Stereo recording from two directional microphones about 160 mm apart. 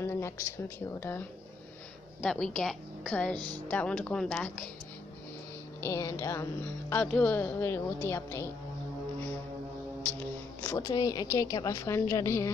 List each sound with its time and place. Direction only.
0.0 s a sound: 15° left (ahead or behind)
0.7 s speech: 15° left (ahead or behind)
2.2 s a woman's voice: 5° left (ahead or behind)
3.3 s speech: 25° right (ahead or behind)
3.6 s speech: 10° left (ahead or behind)
5.8 s speech: 20° left (ahead or behind)
10.6 s a woman's voice: 15° left (ahead or behind)